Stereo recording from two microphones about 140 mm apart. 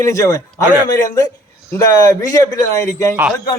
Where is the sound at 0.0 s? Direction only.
20° left (ahead or behind).